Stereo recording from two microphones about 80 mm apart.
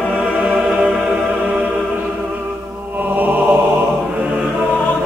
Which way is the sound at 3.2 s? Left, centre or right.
Right.